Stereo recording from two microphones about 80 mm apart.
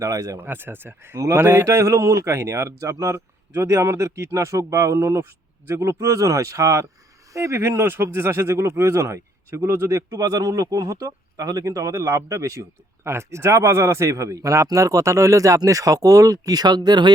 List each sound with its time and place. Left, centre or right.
0.0 s speech: right
0.3 s speech: right
10.1 s speech: right